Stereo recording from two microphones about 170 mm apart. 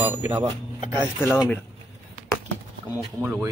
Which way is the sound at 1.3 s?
15° left (ahead or behind).